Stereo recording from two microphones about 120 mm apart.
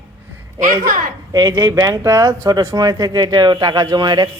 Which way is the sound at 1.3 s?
30° right (ahead or behind).